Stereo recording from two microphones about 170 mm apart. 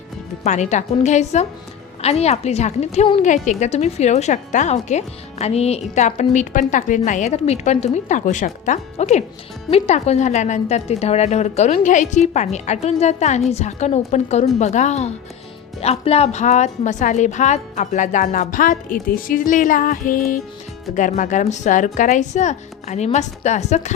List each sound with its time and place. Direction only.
0.4 s a woman's voice: 45° left (ahead or behind)